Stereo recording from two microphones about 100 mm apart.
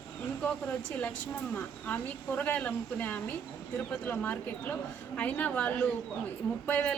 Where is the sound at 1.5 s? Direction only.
15° left (ahead or behind).